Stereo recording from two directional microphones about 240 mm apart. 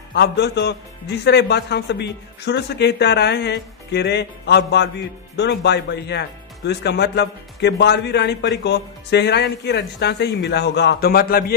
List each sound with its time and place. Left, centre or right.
0.1 s a man's voice: left